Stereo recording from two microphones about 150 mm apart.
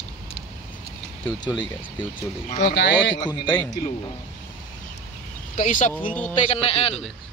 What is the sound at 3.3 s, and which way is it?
Speech, 10° left (ahead or behind).